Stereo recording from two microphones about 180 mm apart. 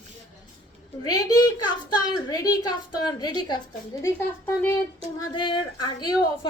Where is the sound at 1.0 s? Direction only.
20° left (ahead or behind).